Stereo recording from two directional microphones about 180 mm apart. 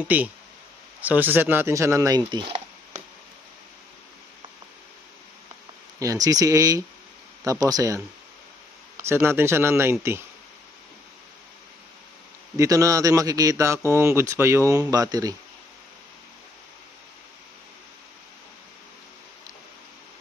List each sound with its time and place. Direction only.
0.0 s speech: 10° right (ahead or behind)
5.9 s speech: 20° right (ahead or behind)
12.5 s speech: 20° right (ahead or behind)